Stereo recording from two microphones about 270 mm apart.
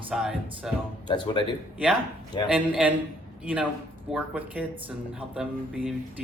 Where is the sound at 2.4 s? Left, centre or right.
Centre.